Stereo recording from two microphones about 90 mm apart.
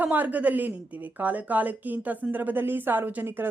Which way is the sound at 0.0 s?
20° right (ahead or behind).